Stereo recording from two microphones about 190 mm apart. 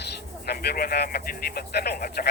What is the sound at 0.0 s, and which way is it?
Speech, 55° left (ahead or behind).